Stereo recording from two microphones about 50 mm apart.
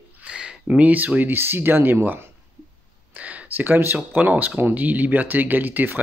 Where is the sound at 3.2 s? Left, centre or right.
Right.